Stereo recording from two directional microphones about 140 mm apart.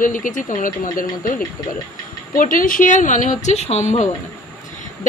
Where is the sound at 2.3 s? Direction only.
75° left (ahead or behind); by 4.1 s 55° left (ahead or behind).